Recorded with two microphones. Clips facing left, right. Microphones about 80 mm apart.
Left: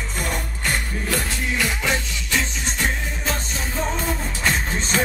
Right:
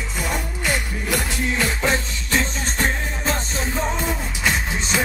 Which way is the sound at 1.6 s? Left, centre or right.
Right.